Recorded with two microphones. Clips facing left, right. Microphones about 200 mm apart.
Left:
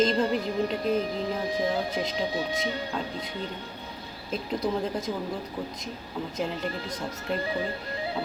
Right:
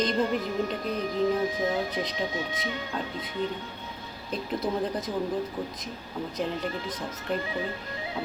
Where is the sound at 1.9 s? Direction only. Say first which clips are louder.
Left 1 dB; centre (ahead or behind).